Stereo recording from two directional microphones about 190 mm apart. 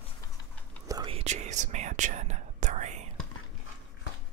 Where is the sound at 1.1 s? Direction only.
35° right (ahead or behind).